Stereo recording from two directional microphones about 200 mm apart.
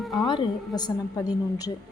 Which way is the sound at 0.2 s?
20° left (ahead or behind).